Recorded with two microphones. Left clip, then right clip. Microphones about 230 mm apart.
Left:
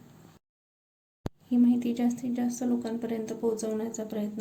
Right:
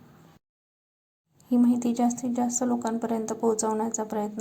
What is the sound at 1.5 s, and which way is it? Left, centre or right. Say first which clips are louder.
A woman's voice: right 2 dB; centre.